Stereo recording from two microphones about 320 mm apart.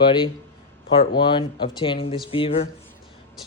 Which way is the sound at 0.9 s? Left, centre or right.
Centre.